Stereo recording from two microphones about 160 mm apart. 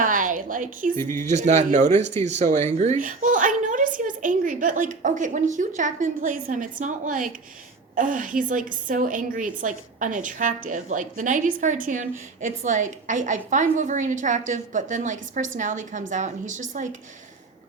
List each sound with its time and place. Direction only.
0.0 s a sound: 55° right (ahead or behind)
0.9 s speech: 15° left (ahead or behind)
1.2 s a woman's voice: 45° right (ahead or behind)